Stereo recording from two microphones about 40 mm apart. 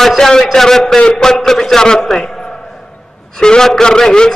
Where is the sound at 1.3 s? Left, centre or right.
Centre.